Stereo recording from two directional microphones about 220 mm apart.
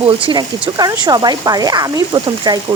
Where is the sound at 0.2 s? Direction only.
25° right (ahead or behind).